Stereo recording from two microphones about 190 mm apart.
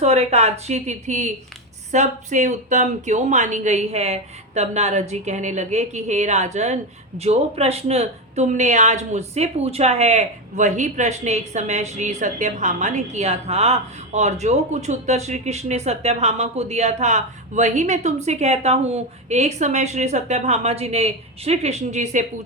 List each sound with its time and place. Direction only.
0.0 s speech: 35° right (ahead or behind)